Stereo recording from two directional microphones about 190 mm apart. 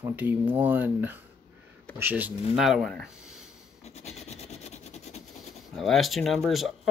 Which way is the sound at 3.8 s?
35° left (ahead or behind).